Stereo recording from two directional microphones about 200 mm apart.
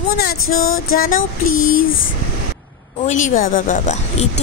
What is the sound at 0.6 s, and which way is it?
Music, 90° left.